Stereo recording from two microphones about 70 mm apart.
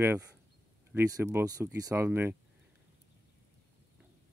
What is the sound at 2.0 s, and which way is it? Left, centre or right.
Speech, right.